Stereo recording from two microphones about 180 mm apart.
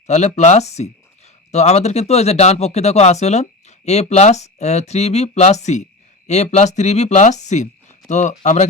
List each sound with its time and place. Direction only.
0.1 s speech: 40° left (ahead or behind)